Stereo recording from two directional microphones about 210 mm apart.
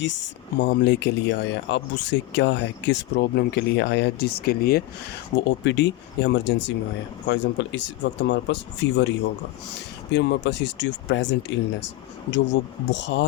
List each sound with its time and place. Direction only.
0.0 s speech: 60° left (ahead or behind)